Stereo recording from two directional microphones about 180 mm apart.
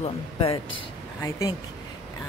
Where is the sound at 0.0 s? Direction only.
30° left (ahead or behind).